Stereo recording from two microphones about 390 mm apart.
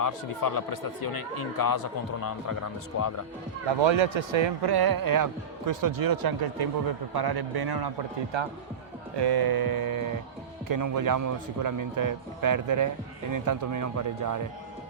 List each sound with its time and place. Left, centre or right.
0.0 s speech: left
3.8 s a man's voice: right
8.3 s speech: right
9.1 s speech: right